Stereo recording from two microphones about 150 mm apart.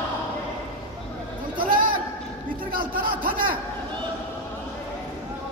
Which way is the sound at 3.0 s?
35° right (ahead or behind).